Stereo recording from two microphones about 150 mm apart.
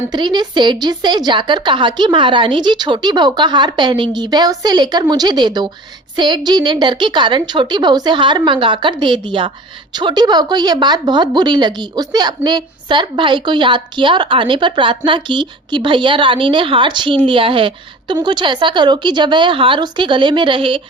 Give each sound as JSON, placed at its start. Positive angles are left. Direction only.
{"t": 0.1, "sound": "a woman's voice", "side_deg": -30}